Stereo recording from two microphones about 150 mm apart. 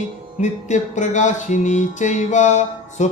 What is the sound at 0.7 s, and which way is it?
Music, 55° left (ahead or behind).